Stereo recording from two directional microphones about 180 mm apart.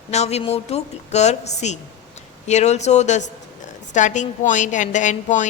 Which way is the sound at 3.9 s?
45° left (ahead or behind).